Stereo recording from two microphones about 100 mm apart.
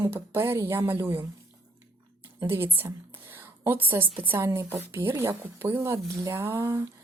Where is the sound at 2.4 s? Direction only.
20° right (ahead or behind).